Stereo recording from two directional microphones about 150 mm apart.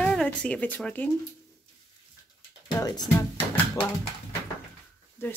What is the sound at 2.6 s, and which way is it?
Speech, 25° left (ahead or behind).